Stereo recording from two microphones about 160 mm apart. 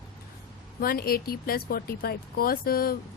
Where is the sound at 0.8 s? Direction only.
65° left (ahead or behind).